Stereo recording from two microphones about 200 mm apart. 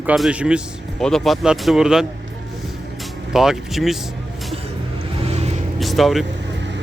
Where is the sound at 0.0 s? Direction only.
5° right (ahead or behind).